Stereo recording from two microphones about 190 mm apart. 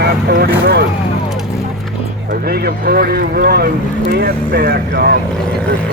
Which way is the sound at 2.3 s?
55° right (ahead or behind).